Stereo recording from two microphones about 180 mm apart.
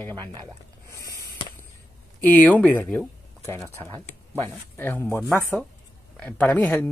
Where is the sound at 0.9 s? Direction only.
20° right (ahead or behind).